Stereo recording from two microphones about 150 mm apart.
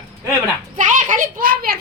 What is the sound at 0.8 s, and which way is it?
Speech, 60° right (ahead or behind).